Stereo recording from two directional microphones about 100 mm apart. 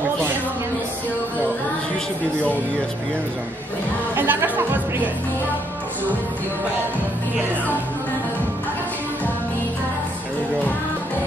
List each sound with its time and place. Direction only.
4.1 s music: 20° right (ahead or behind)